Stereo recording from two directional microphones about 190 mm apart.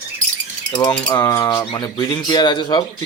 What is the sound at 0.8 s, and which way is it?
Speech, 20° left (ahead or behind).